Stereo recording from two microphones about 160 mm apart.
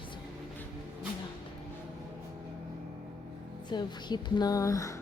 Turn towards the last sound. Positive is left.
turn(degrees=20)  # may be behind; listen again after turning